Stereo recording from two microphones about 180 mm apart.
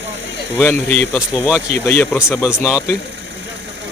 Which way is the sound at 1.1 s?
5° right (ahead or behind).